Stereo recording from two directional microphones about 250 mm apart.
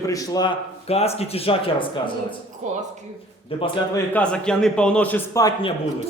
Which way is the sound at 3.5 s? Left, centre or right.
Left.